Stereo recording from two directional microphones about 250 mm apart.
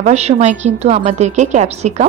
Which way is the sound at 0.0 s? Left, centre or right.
Right.